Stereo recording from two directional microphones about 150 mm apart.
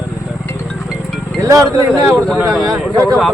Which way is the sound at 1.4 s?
20° right (ahead or behind).